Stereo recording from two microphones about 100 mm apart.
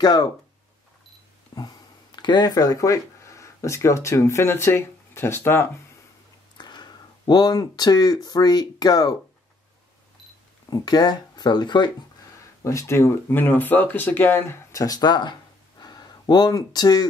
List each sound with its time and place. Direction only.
0.0 s speech: 40° left (ahead or behind)
1.5 s a sound: 35° left (ahead or behind)
2.1 s speech: 45° left (ahead or behind); by 5.7 s 25° left (ahead or behind)
6.6 s speech: 45° left (ahead or behind)
10.7 s speech: 45° left (ahead or behind)
12.6 s speech: 30° left (ahead or behind); by 15.3 s 45° left (ahead or behind)
15.8 s a sound: 40° left (ahead or behind)